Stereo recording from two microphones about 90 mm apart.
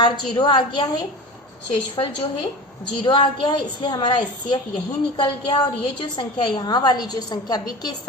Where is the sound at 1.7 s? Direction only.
75° left (ahead or behind).